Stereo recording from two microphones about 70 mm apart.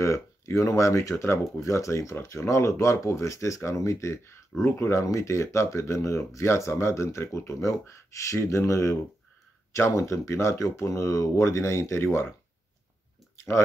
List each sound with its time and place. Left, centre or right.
0.0 s speech: left